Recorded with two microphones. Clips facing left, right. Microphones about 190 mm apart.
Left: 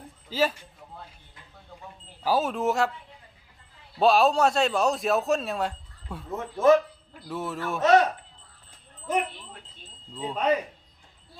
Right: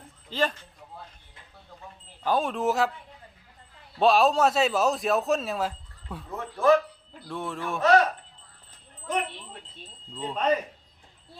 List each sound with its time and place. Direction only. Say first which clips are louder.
0.3 s a man's voice: left 2 dB; 5° left (ahead or behind)
2.2 s a man's voice: left 1 dB; 5° left (ahead or behind)
3.9 s a man's voice: even; centre (ahead or behind)
6.3 s speech: left 2 dB; 20° left (ahead or behind)
7.3 s a man's voice: left 1 dB; 5° left (ahead or behind)
7.8 s speech: left 1 dB; 20° left (ahead or behind)
10.2 s a man's voice: even; 5° left (ahead or behind)